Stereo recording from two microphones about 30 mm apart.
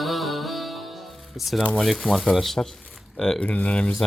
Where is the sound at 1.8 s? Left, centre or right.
Centre.